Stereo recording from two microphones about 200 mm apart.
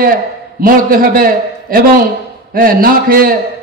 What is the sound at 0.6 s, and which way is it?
A man's voice, 45° right (ahead or behind).